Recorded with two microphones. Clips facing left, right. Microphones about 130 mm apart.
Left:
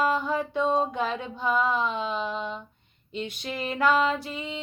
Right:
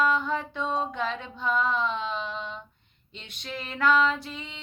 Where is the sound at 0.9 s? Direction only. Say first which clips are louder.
Left 2 dB; 10° left (ahead or behind).